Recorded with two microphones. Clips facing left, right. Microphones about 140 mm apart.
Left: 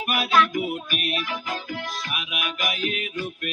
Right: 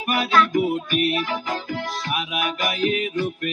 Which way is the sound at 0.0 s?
30° right (ahead or behind).